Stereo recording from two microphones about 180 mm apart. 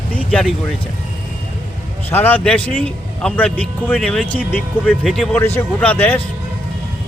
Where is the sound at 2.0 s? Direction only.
10° left (ahead or behind).